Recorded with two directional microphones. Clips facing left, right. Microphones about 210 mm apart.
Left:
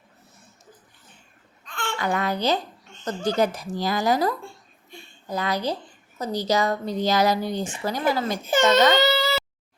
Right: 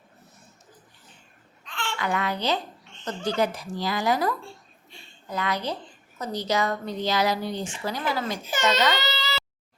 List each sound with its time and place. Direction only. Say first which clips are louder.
1.6 s a child's voice: left 3 dB; 45° left (ahead or behind)
4.9 s a sound: left 4 dB; 35° left (ahead or behind)
6.1 s a woman's voice: left 3 dB; 35° left (ahead or behind); by 9.3 s 55° left (ahead or behind)